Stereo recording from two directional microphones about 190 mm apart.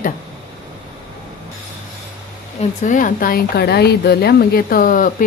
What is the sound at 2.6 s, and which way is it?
Speech, 45° left (ahead or behind).